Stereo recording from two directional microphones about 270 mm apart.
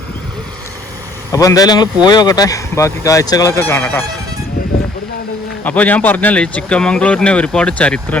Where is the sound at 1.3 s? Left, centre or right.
Centre.